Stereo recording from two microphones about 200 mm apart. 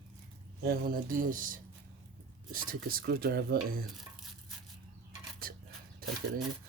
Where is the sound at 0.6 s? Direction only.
45° right (ahead or behind).